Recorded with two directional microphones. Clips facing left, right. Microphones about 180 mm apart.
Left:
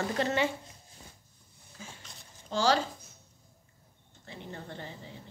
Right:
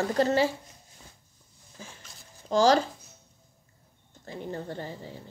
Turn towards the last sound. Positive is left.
turn(degrees=-40)  # may be behind; listen again after turning